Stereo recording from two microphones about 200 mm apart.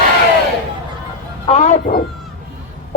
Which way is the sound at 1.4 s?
35° left (ahead or behind).